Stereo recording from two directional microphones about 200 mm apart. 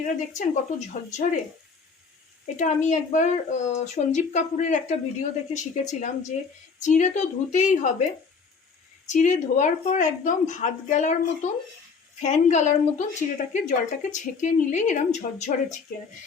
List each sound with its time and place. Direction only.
0.0 s speech: 40° left (ahead or behind)
2.6 s speech: 35° left (ahead or behind)
9.0 s speech: 40° left (ahead or behind)